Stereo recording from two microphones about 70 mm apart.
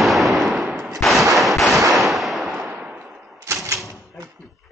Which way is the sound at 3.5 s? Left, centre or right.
Right.